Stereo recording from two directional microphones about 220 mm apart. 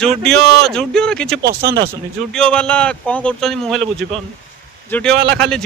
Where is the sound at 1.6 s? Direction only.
45° right (ahead or behind).